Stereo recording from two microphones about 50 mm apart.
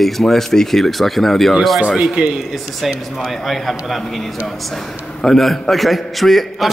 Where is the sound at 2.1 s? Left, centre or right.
Centre.